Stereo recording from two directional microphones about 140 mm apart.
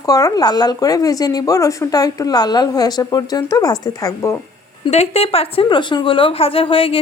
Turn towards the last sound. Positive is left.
turn(degrees=40)  # may be behind; listen again after turning